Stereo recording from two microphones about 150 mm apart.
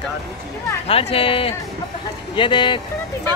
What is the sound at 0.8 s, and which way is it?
Speech, 40° left (ahead or behind).